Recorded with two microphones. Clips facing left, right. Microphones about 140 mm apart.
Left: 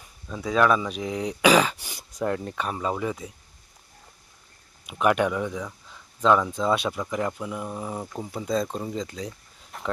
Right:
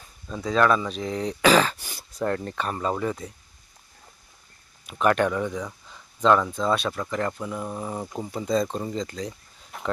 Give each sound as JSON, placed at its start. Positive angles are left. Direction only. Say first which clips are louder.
{"t": 0.3, "sound": "speech", "louder": "even", "side_deg": 5}
{"t": 4.9, "sound": "speech", "louder": "even", "side_deg": 10}
{"t": 6.6, "sound": "speech", "louder": "even", "side_deg": 15}
{"t": 9.7, "sound": "a sound", "louder": "right 1 dB", "side_deg": 0}